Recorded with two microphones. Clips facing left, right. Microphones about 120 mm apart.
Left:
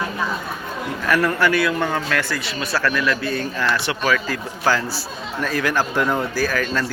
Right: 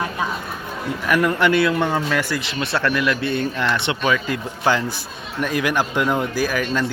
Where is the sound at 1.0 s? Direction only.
15° right (ahead or behind).